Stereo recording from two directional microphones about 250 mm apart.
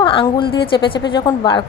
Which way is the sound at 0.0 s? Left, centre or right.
Centre.